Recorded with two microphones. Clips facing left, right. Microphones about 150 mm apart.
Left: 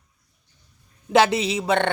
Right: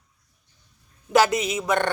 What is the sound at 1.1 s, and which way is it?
Speech, 25° left (ahead or behind).